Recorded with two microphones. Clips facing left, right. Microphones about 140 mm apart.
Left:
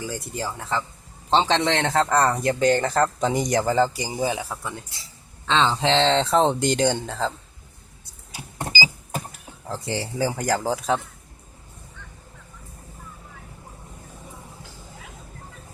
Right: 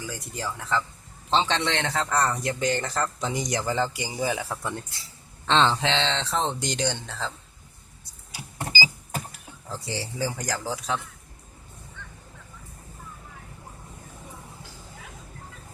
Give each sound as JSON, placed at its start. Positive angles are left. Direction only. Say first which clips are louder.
{"t": 0.0, "sound": "a man's voice", "louder": "left 4 dB", "side_deg": 25}
{"t": 4.2, "sound": "speech", "louder": "left 2 dB", "side_deg": 25}
{"t": 4.5, "sound": "speech", "louder": "right 1 dB", "side_deg": 5}
{"t": 5.8, "sound": "a man's voice", "louder": "left 7 dB", "side_deg": 40}
{"t": 8.7, "sound": "power windows", "louder": "left 2 dB", "side_deg": 10}
{"t": 9.6, "sound": "a man's voice", "louder": "left 5 dB", "side_deg": 55}